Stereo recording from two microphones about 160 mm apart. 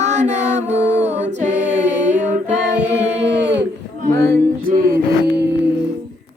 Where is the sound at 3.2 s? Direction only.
90° right.